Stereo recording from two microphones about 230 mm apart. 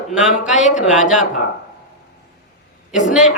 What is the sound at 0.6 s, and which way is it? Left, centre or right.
Speech, left.